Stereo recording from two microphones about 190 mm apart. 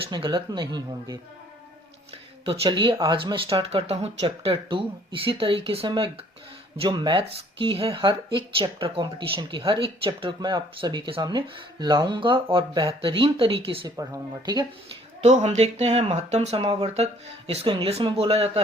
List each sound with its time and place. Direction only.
0.1 s speech: 25° right (ahead or behind)
2.4 s speech: 25° right (ahead or behind)
15.2 s speech: 35° right (ahead or behind)